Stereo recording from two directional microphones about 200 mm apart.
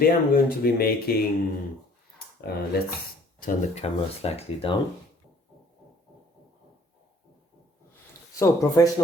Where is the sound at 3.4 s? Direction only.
30° left (ahead or behind).